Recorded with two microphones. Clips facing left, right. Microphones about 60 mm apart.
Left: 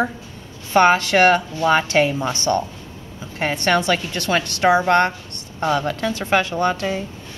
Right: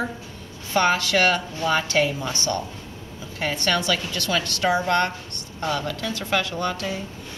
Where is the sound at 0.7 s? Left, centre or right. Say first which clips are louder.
Left 6 dB; left.